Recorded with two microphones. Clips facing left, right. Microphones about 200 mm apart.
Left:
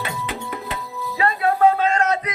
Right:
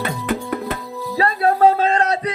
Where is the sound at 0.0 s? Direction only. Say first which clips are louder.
Right 6 dB; 50° right (ahead or behind).